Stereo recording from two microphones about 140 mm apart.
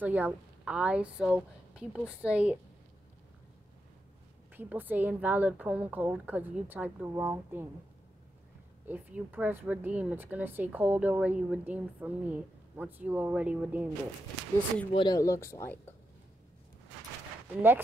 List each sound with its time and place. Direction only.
0.0 s speech: 10° right (ahead or behind)
4.6 s speech: 15° right (ahead or behind)
8.8 s speech: 15° right (ahead or behind)
14.9 s speech: 40° left (ahead or behind)
15.1 s speech: 20° left (ahead or behind)
17.6 s speech: 15° right (ahead or behind)